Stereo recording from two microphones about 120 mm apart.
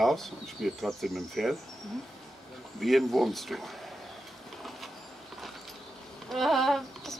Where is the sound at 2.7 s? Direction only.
Centre (ahead or behind).